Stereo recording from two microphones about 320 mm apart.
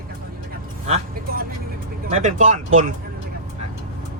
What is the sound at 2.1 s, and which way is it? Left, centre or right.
Speech, right.